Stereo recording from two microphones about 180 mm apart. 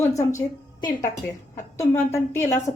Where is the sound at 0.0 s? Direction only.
15° left (ahead or behind).